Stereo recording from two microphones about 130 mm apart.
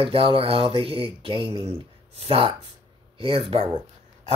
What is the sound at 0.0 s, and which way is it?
Speech, 45° right (ahead or behind).